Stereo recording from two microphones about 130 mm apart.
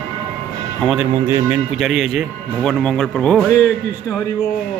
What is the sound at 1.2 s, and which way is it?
Speech, 20° right (ahead or behind).